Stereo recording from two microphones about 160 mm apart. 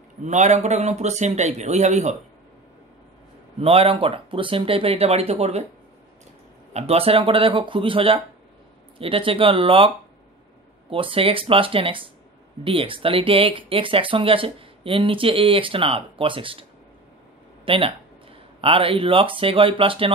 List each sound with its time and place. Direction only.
0.2 s a man's voice: 50° right (ahead or behind)
3.6 s speech: 40° right (ahead or behind)
6.7 s speech: 40° right (ahead or behind)
17.6 s speech: 35° right (ahead or behind)